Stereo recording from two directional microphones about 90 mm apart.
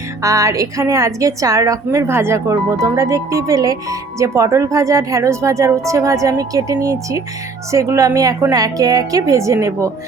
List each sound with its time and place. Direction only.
0.2 s speech: 35° right (ahead or behind)